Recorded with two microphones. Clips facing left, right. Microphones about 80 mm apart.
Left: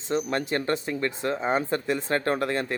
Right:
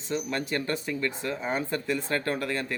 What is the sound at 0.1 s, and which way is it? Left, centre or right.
Speech, left.